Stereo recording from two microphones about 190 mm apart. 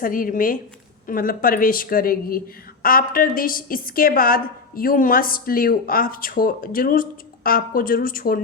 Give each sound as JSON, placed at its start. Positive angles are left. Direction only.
{"t": 0.0, "sound": "a woman's voice", "side_deg": 45}